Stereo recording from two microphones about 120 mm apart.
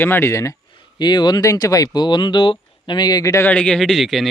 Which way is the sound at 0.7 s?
40° left (ahead or behind).